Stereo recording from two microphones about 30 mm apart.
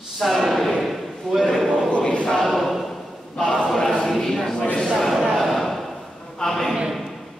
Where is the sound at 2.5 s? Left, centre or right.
Centre.